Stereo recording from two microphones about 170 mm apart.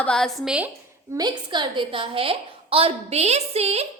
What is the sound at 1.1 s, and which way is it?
A woman's voice, 25° right (ahead or behind).